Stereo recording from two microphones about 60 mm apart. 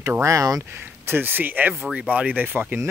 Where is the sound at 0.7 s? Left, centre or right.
Right.